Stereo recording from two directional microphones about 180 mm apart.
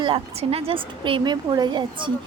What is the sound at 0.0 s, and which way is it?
A woman's voice, 30° right (ahead or behind).